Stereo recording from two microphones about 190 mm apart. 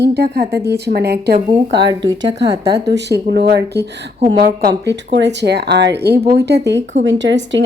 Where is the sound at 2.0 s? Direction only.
70° right (ahead or behind).